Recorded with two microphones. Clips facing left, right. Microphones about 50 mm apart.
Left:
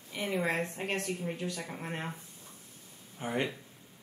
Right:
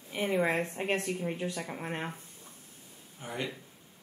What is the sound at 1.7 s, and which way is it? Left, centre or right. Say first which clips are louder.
Speech: right 2 dB; centre.